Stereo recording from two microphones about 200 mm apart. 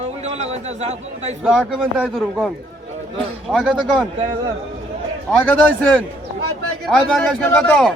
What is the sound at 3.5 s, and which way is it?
Speech, centre (ahead or behind).